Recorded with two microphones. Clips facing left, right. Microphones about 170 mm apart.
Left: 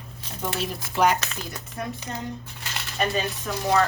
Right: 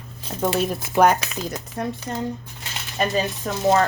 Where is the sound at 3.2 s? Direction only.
25° right (ahead or behind).